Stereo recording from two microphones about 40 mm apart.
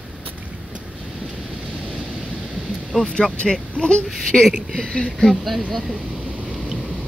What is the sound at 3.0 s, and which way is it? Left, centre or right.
Speech, left.